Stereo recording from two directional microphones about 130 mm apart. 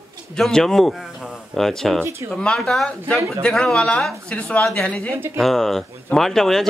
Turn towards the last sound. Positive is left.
turn(degrees=5)  # may be behind; listen again after turning